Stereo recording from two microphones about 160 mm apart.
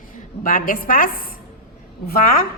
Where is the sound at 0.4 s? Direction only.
60° left (ahead or behind).